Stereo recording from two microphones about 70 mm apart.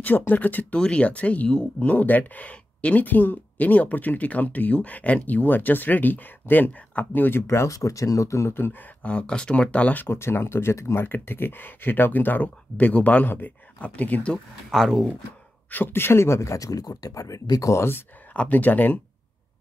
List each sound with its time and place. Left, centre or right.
0.3 s speech: left
9.0 s speech: centre
10.0 s speech: left; by 14.4 s centre
14.7 s speech: centre
15.7 s speech: left
18.3 s speech: left